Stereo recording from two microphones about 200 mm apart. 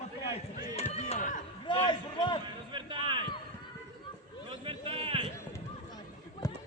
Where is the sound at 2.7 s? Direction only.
25° right (ahead or behind).